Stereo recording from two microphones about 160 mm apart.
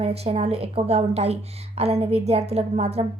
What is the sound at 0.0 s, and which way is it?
A woman's voice, 40° right (ahead or behind).